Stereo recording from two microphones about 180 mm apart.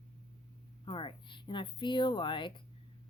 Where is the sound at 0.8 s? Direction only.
25° left (ahead or behind).